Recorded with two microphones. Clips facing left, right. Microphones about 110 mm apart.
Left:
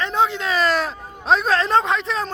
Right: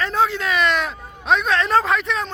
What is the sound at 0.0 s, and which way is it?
A man's voice, 20° left (ahead or behind).